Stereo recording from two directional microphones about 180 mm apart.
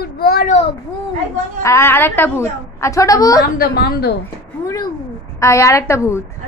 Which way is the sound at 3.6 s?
55° left (ahead or behind).